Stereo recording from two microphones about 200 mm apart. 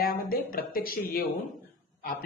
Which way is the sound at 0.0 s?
45° left (ahead or behind).